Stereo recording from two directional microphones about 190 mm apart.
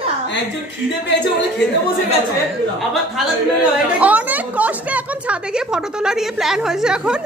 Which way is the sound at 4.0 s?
10° right (ahead or behind).